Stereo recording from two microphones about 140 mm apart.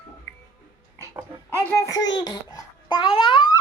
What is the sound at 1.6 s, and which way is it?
Speech, 20° left (ahead or behind).